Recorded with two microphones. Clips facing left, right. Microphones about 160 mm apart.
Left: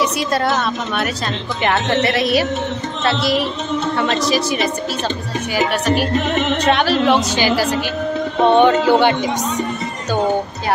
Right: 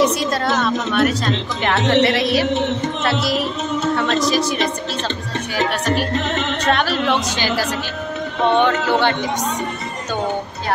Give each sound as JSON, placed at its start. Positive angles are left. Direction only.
{"t": 0.9, "sound": "a woman's voice", "side_deg": 5}
{"t": 6.1, "sound": "speech", "side_deg": 15}
{"t": 6.7, "sound": "a woman's voice", "side_deg": 0}